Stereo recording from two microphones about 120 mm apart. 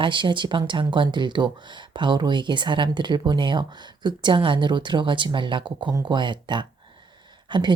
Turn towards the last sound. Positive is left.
turn(degrees=-40)  # may be behind; listen again after turning